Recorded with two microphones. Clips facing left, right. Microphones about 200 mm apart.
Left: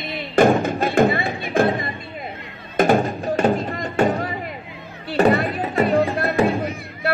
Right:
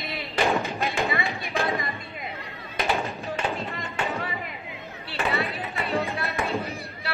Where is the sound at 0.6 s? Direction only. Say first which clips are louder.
Left 10 dB; 50° left (ahead or behind).